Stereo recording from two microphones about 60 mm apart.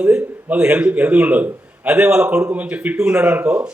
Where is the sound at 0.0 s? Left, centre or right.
Right.